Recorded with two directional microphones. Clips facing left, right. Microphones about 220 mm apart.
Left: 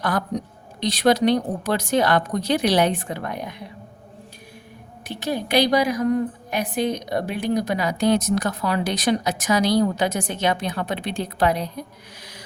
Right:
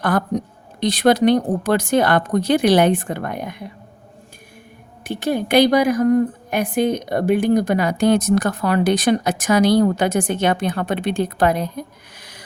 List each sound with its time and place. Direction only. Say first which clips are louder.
0.0 s a woman's voice: right 5 dB; 50° right (ahead or behind)
5.0 s a woman's voice: right 5 dB; 50° right (ahead or behind)